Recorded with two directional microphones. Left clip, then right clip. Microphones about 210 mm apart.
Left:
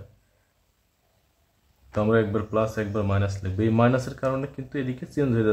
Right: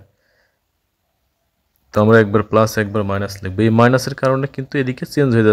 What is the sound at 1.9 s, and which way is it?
Speech, 45° right (ahead or behind).